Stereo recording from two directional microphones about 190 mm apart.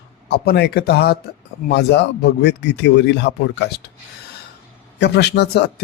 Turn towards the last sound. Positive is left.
turn(degrees=65)  # may be behind; listen again after turning